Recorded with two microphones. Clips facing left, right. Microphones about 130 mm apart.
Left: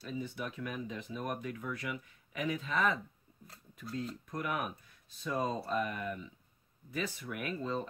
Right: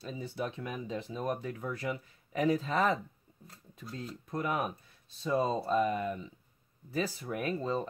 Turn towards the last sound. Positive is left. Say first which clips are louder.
# right 4 dB
turn(degrees=-30)  # may be behind; listen again after turning